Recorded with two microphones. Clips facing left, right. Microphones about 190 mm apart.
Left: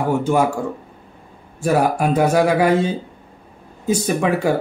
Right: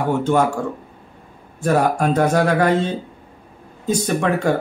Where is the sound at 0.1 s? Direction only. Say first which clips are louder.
Even; 10° left (ahead or behind).